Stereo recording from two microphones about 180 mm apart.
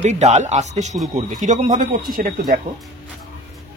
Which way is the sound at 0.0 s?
40° right (ahead or behind).